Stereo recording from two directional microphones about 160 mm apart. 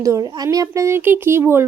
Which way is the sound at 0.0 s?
20° right (ahead or behind).